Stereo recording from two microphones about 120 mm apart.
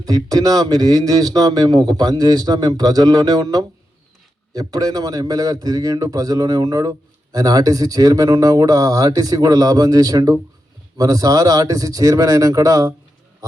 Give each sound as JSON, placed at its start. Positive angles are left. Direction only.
{"t": 0.0, "sound": "speech", "side_deg": -30}